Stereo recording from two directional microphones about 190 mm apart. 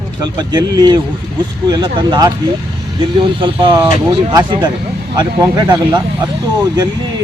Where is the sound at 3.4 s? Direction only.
25° right (ahead or behind).